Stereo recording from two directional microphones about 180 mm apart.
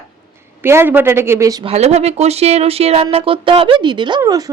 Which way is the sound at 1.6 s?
35° right (ahead or behind).